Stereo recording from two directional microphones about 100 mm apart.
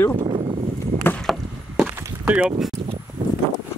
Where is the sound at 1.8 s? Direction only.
15° right (ahead or behind).